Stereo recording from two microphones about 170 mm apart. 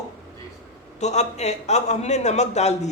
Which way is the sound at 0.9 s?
40° left (ahead or behind).